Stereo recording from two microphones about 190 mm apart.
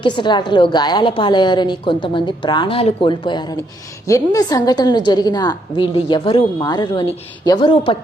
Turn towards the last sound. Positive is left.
turn(degrees=25)  # may be behind; listen again after turning